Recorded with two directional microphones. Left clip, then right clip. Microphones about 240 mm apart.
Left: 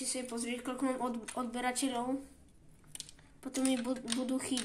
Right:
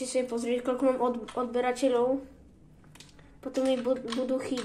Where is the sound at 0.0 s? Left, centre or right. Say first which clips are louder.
Right 10 dB; left.